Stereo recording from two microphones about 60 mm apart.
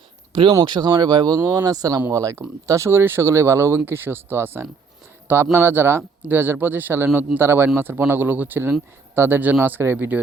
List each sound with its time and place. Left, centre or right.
0.8 s speech: right
1.2 s speech: right
2.0 s speech: right
3.8 s speech: right